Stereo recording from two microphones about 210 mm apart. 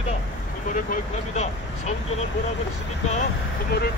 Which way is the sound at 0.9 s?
35° left (ahead or behind).